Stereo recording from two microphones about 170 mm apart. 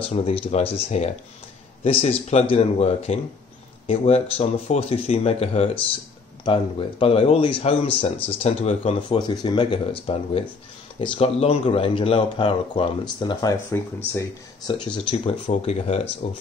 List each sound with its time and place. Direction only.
0.0 s speech: 35° left (ahead or behind)
9.2 s speech: 25° left (ahead or behind)
15.0 s speech: 30° left (ahead or behind)